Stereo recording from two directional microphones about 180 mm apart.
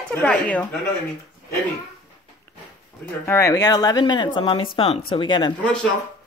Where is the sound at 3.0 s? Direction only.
15° left (ahead or behind).